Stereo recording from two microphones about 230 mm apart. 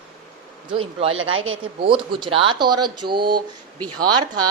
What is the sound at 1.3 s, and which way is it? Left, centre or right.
Speech, right.